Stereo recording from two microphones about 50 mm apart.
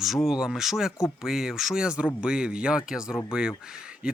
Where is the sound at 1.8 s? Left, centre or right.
Right.